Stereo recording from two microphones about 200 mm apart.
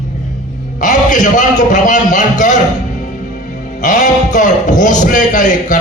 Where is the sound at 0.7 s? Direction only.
40° left (ahead or behind).